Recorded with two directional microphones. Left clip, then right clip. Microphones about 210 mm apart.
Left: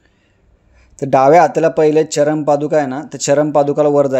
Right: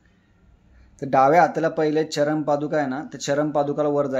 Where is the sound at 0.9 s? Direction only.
35° left (ahead or behind).